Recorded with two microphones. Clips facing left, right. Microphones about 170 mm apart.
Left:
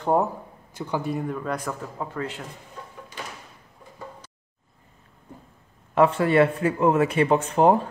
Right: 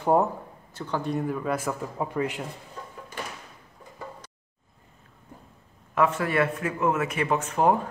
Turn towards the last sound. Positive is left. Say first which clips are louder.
# left 4 dB
turn(degrees=30)  # may be behind; listen again after turning